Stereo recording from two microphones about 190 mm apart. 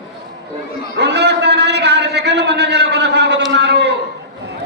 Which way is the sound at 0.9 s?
60° right (ahead or behind).